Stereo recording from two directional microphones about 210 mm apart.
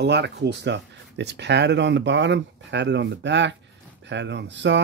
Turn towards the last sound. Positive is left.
turn(degrees=-60)  # may be behind; listen again after turning